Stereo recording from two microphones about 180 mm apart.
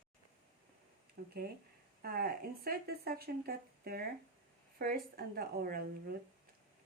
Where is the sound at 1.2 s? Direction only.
60° right (ahead or behind).